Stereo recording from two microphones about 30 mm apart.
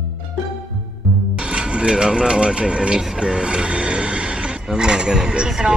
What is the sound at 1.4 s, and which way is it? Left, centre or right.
Speech, right.